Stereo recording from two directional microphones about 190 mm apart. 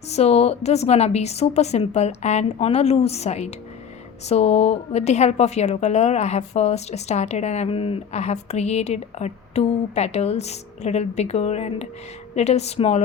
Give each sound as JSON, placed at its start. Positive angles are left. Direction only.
{"t": 0.1, "sound": "a woman's voice", "side_deg": 35}